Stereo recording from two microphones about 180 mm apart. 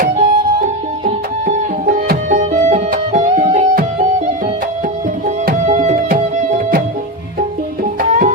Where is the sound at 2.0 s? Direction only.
55° right (ahead or behind).